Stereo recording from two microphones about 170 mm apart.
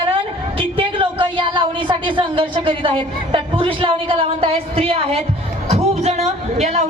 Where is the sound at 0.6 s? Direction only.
30° right (ahead or behind).